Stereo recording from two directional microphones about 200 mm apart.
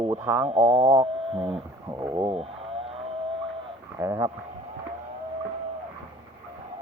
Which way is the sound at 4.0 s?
15° right (ahead or behind).